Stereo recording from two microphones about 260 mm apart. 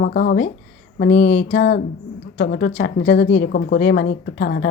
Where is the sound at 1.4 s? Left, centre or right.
Left.